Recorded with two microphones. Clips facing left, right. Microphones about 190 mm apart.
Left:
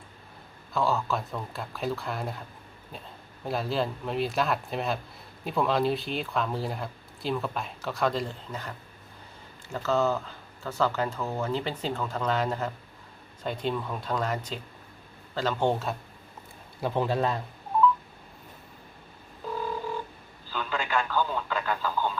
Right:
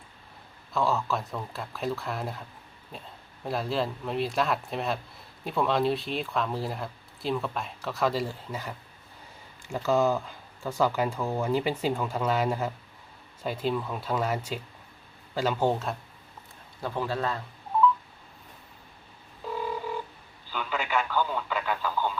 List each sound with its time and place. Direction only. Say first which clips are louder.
0.7 s speech: even; centre (ahead or behind)
3.4 s speech: even; centre (ahead or behind)
9.7 s speech: right 2 dB; 10° right (ahead or behind)
16.8 s a man's voice: left 3 dB; 20° left (ahead or behind)
20.5 s radio: even; 5° right (ahead or behind)